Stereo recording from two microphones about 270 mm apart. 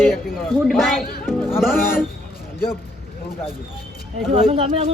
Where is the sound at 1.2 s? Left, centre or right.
Centre.